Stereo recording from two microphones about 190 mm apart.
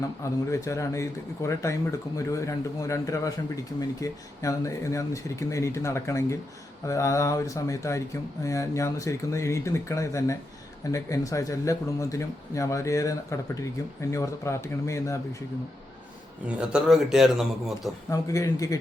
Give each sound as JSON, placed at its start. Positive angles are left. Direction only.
{"t": 0.5, "sound": "speech", "side_deg": 15}
{"t": 16.6, "sound": "speech", "side_deg": -5}
{"t": 18.1, "sound": "speech", "side_deg": 15}